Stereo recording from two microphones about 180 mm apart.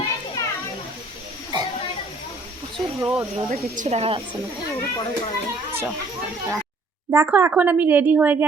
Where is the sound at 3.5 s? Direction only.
45° right (ahead or behind).